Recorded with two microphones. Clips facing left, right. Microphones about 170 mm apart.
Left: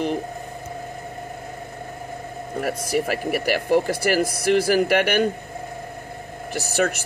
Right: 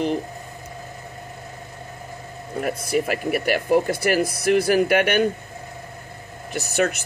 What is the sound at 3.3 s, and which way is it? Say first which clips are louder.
Speech: right 1 dB; 5° left (ahead or behind).